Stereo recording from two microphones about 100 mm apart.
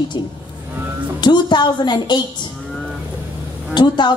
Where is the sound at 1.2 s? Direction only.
50° left (ahead or behind).